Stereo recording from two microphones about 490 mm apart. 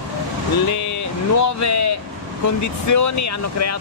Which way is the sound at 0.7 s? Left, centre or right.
Left.